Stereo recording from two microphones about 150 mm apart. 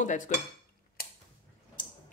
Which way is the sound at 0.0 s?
55° left (ahead or behind).